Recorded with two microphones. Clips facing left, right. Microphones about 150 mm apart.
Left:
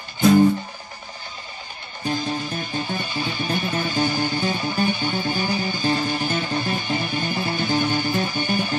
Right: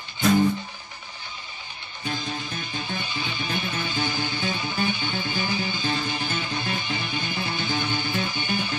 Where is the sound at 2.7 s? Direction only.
45° left (ahead or behind).